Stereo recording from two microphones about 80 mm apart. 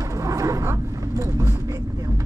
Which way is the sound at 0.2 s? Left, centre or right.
Right.